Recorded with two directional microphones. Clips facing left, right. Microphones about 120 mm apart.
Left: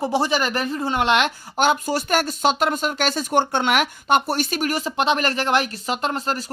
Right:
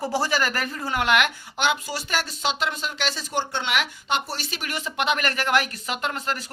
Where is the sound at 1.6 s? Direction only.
45° left (ahead or behind).